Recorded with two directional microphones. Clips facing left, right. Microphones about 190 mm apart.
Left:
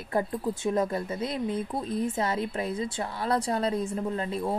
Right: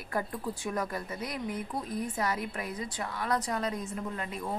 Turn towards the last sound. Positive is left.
turn(degrees=30)  # may be behind; listen again after turning